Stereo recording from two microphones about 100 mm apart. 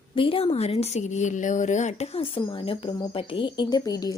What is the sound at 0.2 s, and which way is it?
Speech, 65° left (ahead or behind).